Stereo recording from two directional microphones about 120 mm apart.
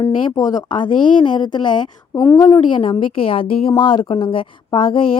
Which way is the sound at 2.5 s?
45° left (ahead or behind).